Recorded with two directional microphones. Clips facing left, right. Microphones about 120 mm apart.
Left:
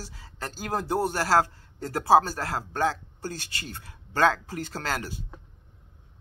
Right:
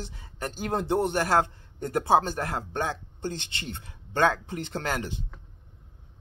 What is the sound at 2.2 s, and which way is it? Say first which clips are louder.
Speech: right 1 dB; 20° right (ahead or behind).